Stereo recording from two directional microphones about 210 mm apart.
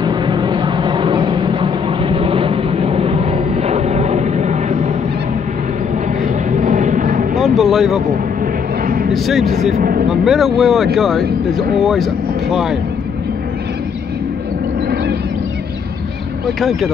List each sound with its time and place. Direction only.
0.0 s vehicle: 20° right (ahead or behind)
6.5 s a sound: 35° right (ahead or behind)
7.3 s vehicle: centre (ahead or behind)
8.8 s a sound: 45° right (ahead or behind)
9.1 s speech: centre (ahead or behind)
9.8 s speech: 45° right (ahead or behind)
10.2 s speech: centre (ahead or behind)